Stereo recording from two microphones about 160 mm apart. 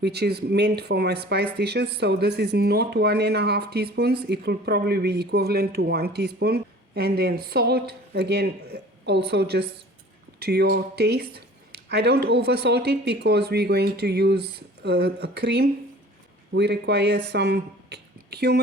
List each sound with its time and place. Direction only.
0.0 s speech: 90° right